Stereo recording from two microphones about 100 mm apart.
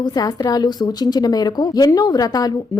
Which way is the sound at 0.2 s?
40° left (ahead or behind).